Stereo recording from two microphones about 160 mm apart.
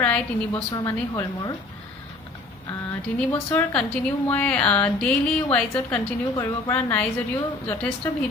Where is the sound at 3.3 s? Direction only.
10° left (ahead or behind).